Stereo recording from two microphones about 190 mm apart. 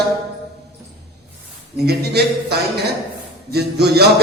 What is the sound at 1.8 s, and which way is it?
A man's voice, 60° right (ahead or behind).